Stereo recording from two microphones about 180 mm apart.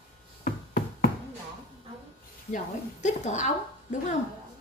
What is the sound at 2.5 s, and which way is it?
Speech, 40° left (ahead or behind).